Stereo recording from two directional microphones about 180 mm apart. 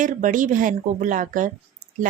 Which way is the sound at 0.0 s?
45° right (ahead or behind).